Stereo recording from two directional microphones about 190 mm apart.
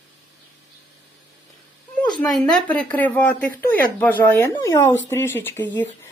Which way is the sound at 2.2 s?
5° left (ahead or behind).